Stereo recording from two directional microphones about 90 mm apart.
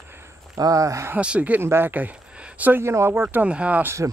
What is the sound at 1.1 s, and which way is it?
Speech, 15° right (ahead or behind).